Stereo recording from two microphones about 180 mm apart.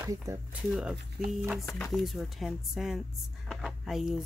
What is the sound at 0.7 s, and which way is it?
Speech, centre (ahead or behind).